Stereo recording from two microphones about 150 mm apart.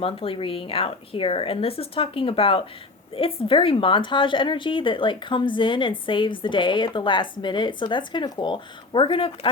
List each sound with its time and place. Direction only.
0.0 s speech: 40° left (ahead or behind)